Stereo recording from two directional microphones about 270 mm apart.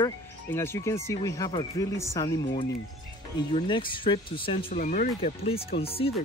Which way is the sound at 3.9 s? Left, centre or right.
Centre.